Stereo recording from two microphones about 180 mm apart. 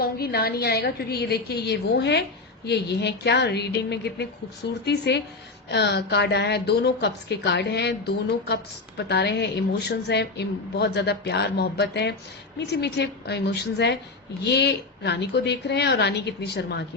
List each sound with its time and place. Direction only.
0.0 s a woman's voice: 60° left (ahead or behind)